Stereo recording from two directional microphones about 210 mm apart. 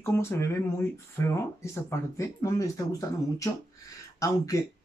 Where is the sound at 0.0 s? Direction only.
10° left (ahead or behind).